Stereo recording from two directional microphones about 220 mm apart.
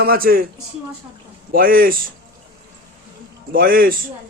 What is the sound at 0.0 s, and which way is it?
Speech, 45° right (ahead or behind).